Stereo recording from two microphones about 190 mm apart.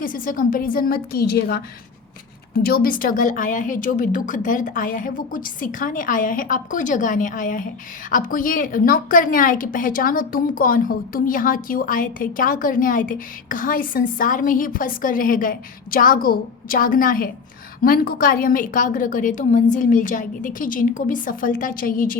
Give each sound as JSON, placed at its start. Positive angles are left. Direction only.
{"t": 0.0, "sound": "a woman's voice", "side_deg": 45}